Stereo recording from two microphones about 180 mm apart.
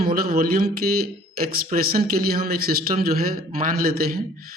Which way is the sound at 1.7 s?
55° right (ahead or behind).